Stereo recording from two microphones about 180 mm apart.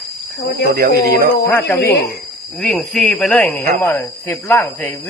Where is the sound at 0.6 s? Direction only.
60° right (ahead or behind).